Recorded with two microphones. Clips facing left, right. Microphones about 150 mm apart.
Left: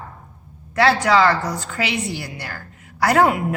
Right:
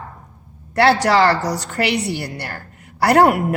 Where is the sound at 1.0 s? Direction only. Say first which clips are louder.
Right 1 dB; 65° right (ahead or behind).